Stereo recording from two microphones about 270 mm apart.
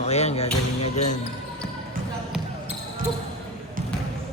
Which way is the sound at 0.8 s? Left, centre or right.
Left.